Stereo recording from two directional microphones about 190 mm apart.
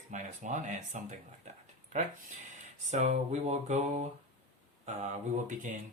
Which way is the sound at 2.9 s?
35° right (ahead or behind).